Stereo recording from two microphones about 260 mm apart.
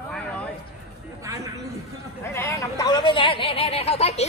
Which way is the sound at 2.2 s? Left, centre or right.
Centre.